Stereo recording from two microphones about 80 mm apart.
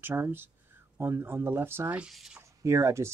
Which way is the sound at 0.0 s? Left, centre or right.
Right.